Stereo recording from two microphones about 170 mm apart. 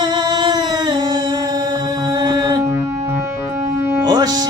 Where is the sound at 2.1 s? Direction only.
20° right (ahead or behind).